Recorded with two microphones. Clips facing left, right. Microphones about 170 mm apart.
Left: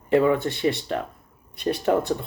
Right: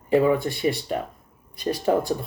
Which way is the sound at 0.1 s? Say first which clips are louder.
Even; 10° right (ahead or behind).